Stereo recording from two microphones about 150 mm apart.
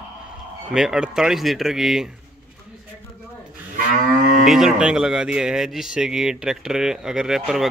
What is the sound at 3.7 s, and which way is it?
Moo, 70° right (ahead or behind).